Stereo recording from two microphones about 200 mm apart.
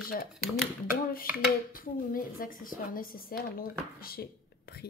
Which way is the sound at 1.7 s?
45° left (ahead or behind).